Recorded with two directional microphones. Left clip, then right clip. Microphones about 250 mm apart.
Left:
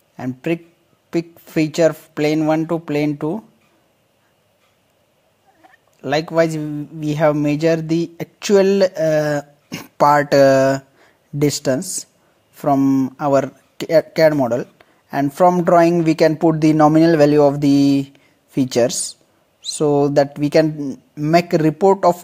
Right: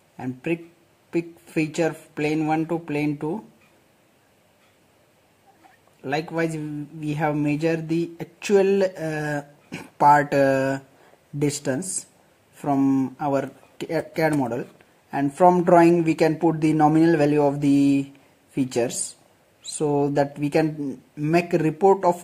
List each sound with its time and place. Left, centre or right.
0.2 s speech: left
5.9 s speech: left